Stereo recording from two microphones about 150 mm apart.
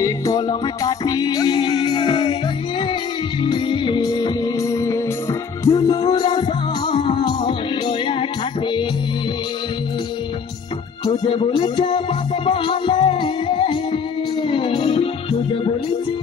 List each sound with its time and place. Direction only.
0.0 s music: 25° left (ahead or behind)
3.4 s music: 35° left (ahead or behind)
11.1 s speech: 35° left (ahead or behind)
12.4 s music: 35° left (ahead or behind)